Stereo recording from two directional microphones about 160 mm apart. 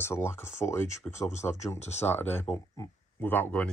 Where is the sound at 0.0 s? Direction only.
15° left (ahead or behind).